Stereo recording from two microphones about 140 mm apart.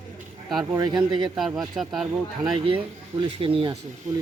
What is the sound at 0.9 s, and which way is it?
A man's voice, 5° right (ahead or behind).